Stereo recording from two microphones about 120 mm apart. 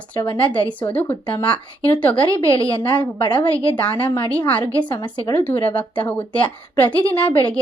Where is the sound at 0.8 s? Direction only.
15° left (ahead or behind).